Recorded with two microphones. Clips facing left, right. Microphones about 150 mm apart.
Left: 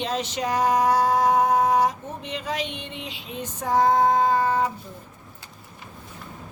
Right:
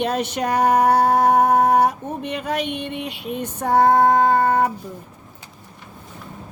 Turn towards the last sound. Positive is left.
turn(degrees=-60)  # may be behind; listen again after turning